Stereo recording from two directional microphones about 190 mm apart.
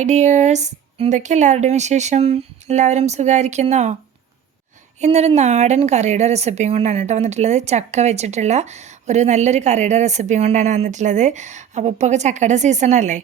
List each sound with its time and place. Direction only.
0.0 s speech: 35° right (ahead or behind)
4.9 s speech: 35° right (ahead or behind)